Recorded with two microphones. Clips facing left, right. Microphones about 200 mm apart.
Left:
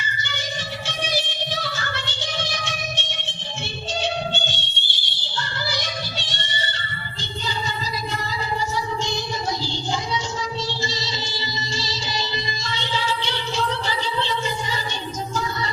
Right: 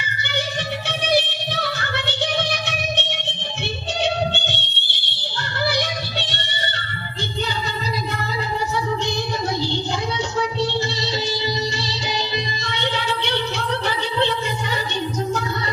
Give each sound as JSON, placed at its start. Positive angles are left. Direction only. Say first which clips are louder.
{"t": 0.9, "sound": "music", "louder": "right 8 dB", "side_deg": -60}
{"t": 10.6, "sound": "music", "louder": "right 6 dB", "side_deg": -60}